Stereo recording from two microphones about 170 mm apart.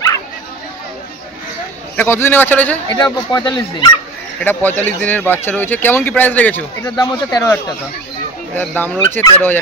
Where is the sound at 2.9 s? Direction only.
20° left (ahead or behind).